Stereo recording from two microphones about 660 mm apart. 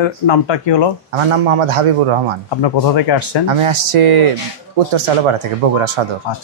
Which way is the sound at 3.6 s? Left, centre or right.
Right.